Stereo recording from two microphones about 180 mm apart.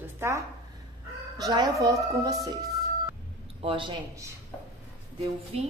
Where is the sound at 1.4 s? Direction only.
25° right (ahead or behind).